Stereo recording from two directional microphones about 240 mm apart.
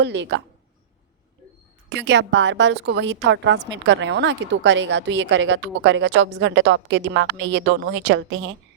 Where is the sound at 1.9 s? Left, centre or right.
Right.